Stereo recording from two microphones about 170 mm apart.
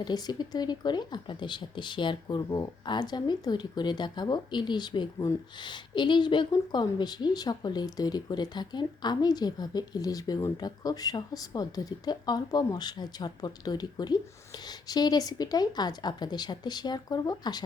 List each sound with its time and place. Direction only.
0.0 s speech: 25° left (ahead or behind)